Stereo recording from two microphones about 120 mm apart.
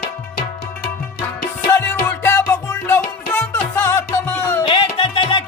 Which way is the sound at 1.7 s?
20° left (ahead or behind).